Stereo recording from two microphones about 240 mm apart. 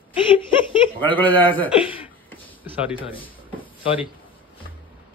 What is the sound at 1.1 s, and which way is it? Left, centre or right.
Speech, centre.